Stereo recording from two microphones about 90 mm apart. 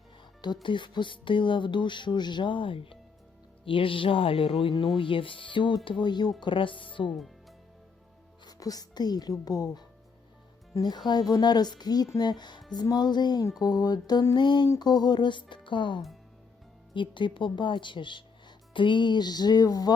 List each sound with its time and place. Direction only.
0.4 s speech: 60° left (ahead or behind)
6.4 s speech: 70° left (ahead or behind)
8.4 s speech: 45° left (ahead or behind)